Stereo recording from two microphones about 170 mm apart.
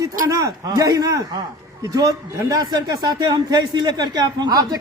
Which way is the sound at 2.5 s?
25° right (ahead or behind).